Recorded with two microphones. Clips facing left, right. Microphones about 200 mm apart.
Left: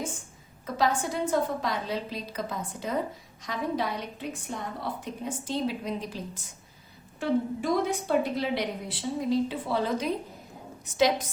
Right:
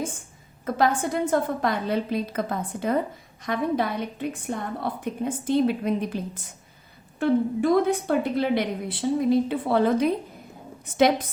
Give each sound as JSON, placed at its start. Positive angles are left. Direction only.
{"t": 0.6, "sound": "a woman's voice", "side_deg": -55}